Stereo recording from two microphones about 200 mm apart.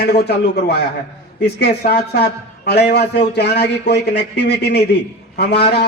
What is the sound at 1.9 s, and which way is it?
A man's voice, 55° left (ahead or behind).